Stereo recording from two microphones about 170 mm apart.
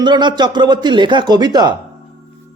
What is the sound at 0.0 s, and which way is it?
Speech, 25° right (ahead or behind).